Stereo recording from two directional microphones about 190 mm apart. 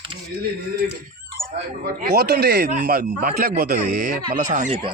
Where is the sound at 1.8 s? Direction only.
50° right (ahead or behind).